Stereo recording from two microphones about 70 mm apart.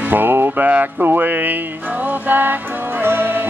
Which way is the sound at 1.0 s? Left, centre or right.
Right.